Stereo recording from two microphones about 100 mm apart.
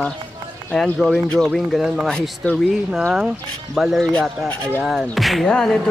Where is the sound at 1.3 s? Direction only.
5° left (ahead or behind).